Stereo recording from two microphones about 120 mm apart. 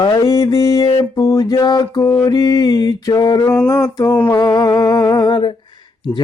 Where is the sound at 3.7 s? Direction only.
30° left (ahead or behind).